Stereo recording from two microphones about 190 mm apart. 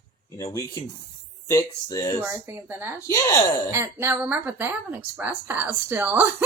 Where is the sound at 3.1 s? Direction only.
15° left (ahead or behind).